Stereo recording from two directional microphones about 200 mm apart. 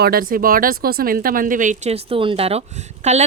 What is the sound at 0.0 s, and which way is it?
Speech, 45° right (ahead or behind).